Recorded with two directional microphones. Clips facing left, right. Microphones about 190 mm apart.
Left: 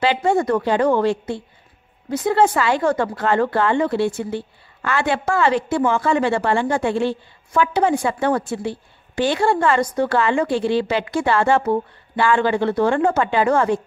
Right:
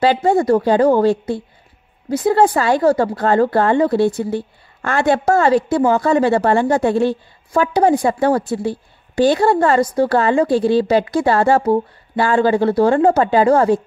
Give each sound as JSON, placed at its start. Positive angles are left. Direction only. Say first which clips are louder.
{"t": 0.0, "sound": "speech", "louder": "right 4 dB", "side_deg": -40}